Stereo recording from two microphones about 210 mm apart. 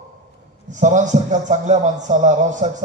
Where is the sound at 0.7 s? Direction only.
35° right (ahead or behind).